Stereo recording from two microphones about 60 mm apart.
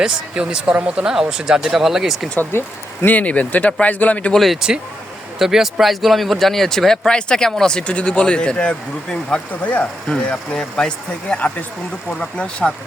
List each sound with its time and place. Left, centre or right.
0.0 s speech: centre
2.5 s speech: left
4.3 s speech: centre; by 9.8 s left
10.1 s speech: centre